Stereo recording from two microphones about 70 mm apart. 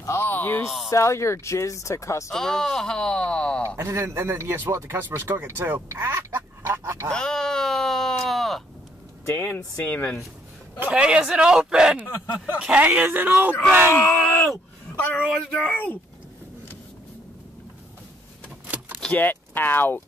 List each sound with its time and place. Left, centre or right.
0.0 s a sound: left
0.3 s a sound: left
0.8 s speech: left
2.3 s speech: centre
3.8 s a man's voice: right
4.9 s speech: right
6.6 s speech: right
7.1 s a sound: centre
9.3 s speech: left
10.9 s a man's voice: centre; by 13.9 s right
13.9 s speech: left
19.1 s speech: left